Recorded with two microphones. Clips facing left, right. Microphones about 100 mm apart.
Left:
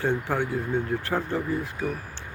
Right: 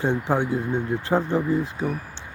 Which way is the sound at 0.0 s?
20° right (ahead or behind).